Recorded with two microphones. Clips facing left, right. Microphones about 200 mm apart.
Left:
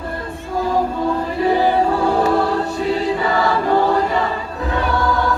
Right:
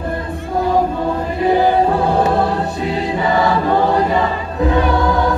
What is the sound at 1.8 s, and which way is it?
Choir, 20° right (ahead or behind).